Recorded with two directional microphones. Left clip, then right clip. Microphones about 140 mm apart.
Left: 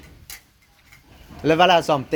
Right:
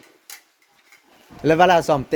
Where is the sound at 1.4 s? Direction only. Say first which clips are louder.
Right 1 dB; 40° right (ahead or behind).